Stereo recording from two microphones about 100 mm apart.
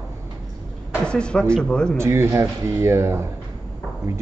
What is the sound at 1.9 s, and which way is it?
Speech, 25° right (ahead or behind).